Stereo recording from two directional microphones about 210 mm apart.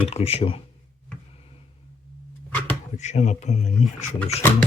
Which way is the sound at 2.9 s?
35° left (ahead or behind).